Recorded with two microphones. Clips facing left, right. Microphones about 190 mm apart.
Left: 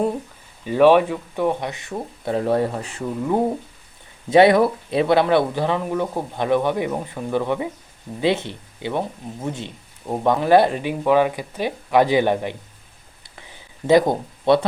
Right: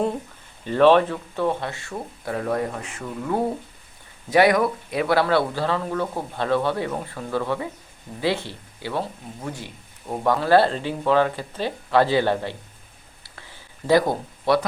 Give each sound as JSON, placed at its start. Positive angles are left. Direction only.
{"t": 0.6, "sound": "speech", "side_deg": 10}
{"t": 4.3, "sound": "speech", "side_deg": 25}
{"t": 13.2, "sound": "a sound", "side_deg": 20}